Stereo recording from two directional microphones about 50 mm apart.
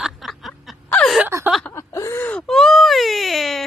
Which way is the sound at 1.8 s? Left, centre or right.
Left.